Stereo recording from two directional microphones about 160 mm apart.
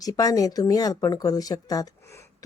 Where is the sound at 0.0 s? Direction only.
25° left (ahead or behind).